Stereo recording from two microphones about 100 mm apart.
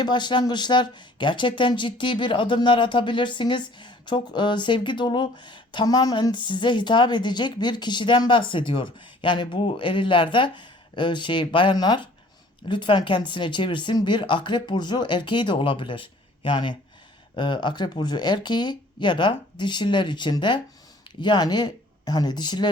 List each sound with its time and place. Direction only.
0.0 s speech: 50° left (ahead or behind)